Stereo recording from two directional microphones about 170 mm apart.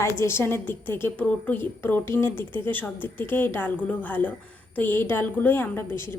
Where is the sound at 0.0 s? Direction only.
15° left (ahead or behind).